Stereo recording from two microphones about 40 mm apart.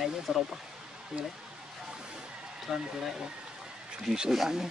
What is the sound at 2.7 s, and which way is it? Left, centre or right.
Speech, centre.